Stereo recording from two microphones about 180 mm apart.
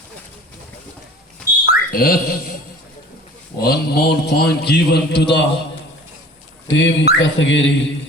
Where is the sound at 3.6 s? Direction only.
60° left (ahead or behind).